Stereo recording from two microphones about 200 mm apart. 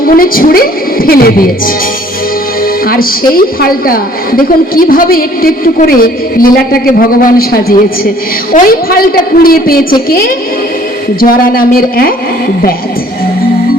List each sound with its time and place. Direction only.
0.0 s a woman's voice: 45° left (ahead or behind)
2.8 s a woman's voice: 45° left (ahead or behind)